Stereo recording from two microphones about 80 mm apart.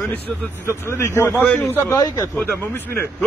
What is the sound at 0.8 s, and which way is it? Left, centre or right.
Speech, left.